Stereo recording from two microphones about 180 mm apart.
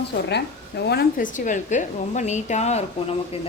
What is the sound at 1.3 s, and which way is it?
A woman's voice, 45° left (ahead or behind).